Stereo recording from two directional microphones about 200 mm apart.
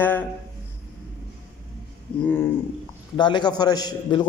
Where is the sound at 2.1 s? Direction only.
10° left (ahead or behind).